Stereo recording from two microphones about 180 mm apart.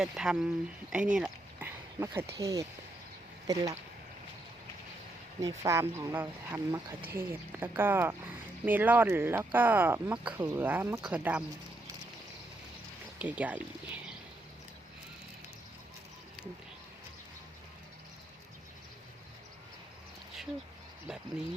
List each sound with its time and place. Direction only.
0.0 s speech: 5° right (ahead or behind)
0.9 s a sound: 5° right (ahead or behind)
2.4 s speech: 20° right (ahead or behind)
5.4 s speech: 20° right (ahead or behind)
13.1 s speech: 10° right (ahead or behind)